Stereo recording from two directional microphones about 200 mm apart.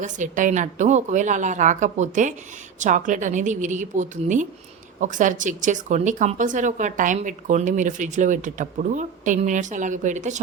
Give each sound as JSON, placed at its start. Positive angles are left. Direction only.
{"t": 0.0, "sound": "speech", "side_deg": -40}